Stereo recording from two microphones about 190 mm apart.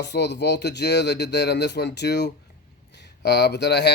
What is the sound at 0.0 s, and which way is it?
Speech, 65° left (ahead or behind).